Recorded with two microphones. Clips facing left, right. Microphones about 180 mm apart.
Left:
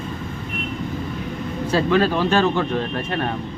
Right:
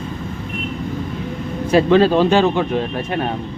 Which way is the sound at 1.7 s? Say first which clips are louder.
Right 6 dB; 20° right (ahead or behind).